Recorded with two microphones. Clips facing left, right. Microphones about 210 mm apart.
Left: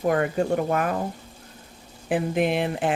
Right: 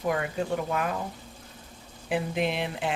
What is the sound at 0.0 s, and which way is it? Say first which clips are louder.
Speech: left 6 dB; 50° left (ahead or behind).